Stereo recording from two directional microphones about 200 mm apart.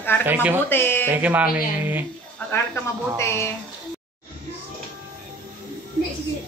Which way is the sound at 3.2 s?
15° left (ahead or behind).